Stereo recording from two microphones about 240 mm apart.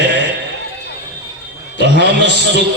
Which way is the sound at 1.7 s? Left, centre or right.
Left.